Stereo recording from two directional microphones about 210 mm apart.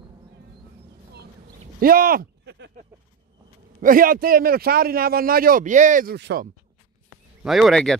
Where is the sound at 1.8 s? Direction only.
45° right (ahead or behind).